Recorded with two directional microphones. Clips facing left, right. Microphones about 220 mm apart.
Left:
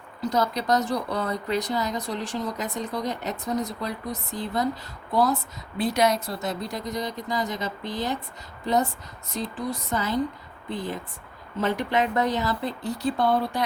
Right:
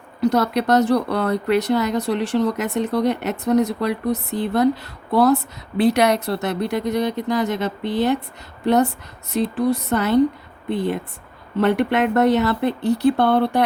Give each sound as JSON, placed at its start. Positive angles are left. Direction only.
{"t": 0.2, "sound": "speech", "side_deg": -65}